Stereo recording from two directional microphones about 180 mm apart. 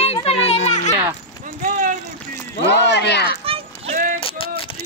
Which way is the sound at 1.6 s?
45° right (ahead or behind).